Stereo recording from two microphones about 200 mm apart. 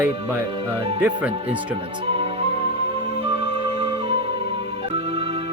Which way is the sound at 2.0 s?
30° right (ahead or behind).